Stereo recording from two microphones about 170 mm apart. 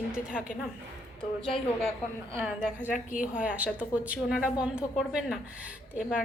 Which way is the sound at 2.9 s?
50° left (ahead or behind).